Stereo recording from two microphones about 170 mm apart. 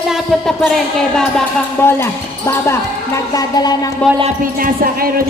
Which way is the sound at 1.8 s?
15° left (ahead or behind).